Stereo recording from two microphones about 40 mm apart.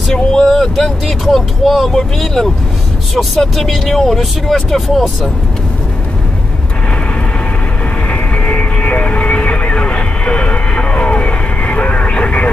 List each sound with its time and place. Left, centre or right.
0.1 s speech: centre
8.1 s vehicle: left